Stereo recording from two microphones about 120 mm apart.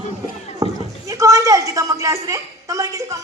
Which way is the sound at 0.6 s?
30° right (ahead or behind).